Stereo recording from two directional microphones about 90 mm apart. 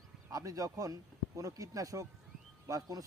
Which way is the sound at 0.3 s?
40° right (ahead or behind).